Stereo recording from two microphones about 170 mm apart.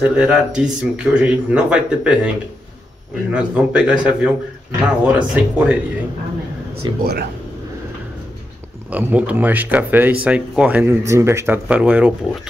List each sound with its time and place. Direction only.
0.0 s speech: 5° right (ahead or behind)
6.9 s speech: 25° right (ahead or behind)
8.9 s speech: 10° right (ahead or behind)